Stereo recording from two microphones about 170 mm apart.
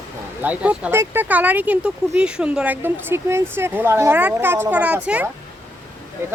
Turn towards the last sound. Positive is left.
turn(degrees=-15)  # may be behind; listen again after turning